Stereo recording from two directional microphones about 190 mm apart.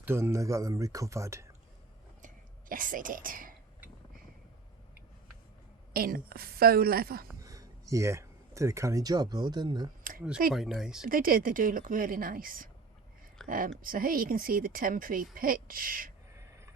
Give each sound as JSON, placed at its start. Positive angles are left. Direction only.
{"t": 0.0, "sound": "speech", "side_deg": -15}
{"t": 2.2, "sound": "a sound", "side_deg": -45}
{"t": 5.9, "sound": "speech", "side_deg": -50}
{"t": 7.4, "sound": "speech", "side_deg": -20}
{"t": 10.0, "sound": "a sound", "side_deg": -45}
{"t": 10.5, "sound": "speech", "side_deg": 0}
{"t": 11.1, "sound": "speech", "side_deg": -50}